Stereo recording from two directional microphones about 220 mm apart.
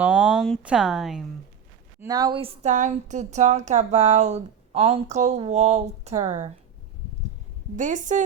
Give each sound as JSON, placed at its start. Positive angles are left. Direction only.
{"t": 0.0, "sound": "speech", "side_deg": 0}
{"t": 2.0, "sound": "a woman's voice", "side_deg": -15}
{"t": 7.8, "sound": "a woman's voice", "side_deg": -35}